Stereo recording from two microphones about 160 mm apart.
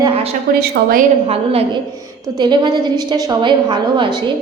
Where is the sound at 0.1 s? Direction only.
35° right (ahead or behind).